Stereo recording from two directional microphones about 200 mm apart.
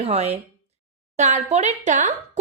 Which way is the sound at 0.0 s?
30° right (ahead or behind).